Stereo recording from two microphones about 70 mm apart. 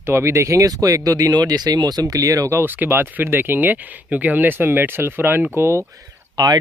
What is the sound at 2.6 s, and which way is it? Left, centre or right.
Speech, right.